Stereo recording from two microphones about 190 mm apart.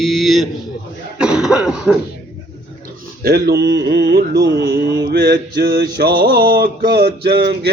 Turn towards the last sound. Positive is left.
turn(degrees=-60)  # may be behind; listen again after turning